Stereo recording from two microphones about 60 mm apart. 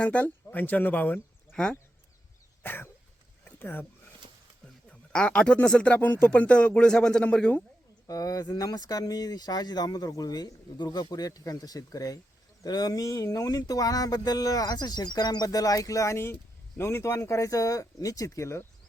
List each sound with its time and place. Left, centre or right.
0.0 s speech: left
2.6 s cough: left
4.6 s speech: centre
8.0 s speech: left
12.7 s a sound: left